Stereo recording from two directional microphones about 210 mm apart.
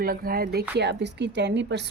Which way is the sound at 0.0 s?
45° right (ahead or behind).